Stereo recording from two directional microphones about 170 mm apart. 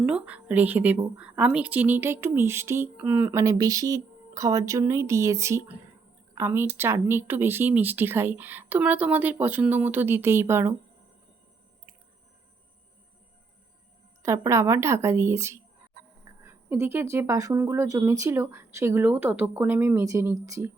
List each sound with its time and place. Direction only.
0.0 s speech: 5° right (ahead or behind)
14.2 s speech: 20° right (ahead or behind)